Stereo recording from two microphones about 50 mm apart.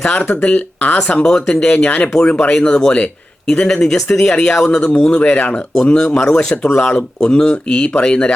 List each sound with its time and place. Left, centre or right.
0.0 s speech: left
1.2 s speech: centre
1.5 s speech: left
5.8 s speech: centre